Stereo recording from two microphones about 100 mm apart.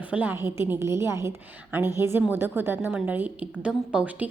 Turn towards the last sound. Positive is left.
turn(degrees=-15)  # may be behind; listen again after turning